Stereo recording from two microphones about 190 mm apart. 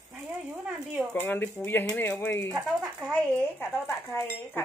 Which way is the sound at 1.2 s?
10° left (ahead or behind).